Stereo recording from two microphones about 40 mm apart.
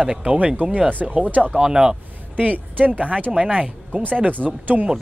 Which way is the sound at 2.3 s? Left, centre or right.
Right.